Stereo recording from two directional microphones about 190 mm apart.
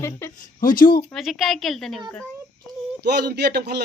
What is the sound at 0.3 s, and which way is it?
Speech, 45° left (ahead or behind).